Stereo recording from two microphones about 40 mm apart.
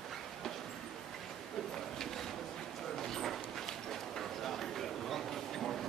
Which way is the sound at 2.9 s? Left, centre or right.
Centre.